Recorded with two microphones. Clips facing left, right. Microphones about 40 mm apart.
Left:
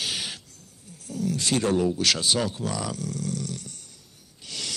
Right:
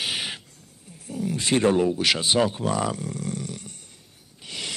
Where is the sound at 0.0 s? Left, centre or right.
Right.